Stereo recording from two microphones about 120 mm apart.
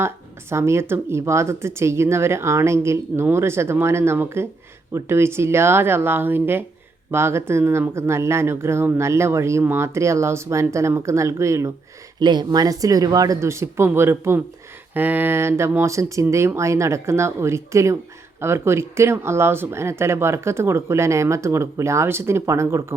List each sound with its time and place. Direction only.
0.5 s speech: 20° right (ahead or behind)
12.2 s speech: 40° right (ahead or behind); by 23.0 s 25° right (ahead or behind)